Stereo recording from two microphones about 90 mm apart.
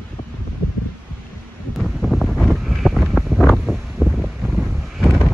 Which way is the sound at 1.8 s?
Centre (ahead or behind).